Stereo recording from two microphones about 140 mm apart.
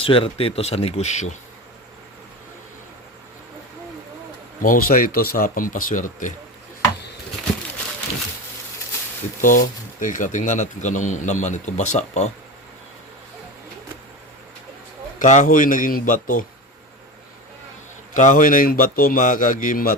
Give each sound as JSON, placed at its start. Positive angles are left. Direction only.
{"t": 0.0, "sound": "speech", "side_deg": 40}
{"t": 4.6, "sound": "speech", "side_deg": 85}
{"t": 9.4, "sound": "a man's voice", "side_deg": 70}
{"t": 15.2, "sound": "speech", "side_deg": 60}
{"t": 18.1, "sound": "a man's voice", "side_deg": 65}